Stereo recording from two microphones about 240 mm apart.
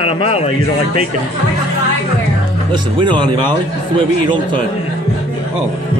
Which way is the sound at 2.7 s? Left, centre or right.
Centre.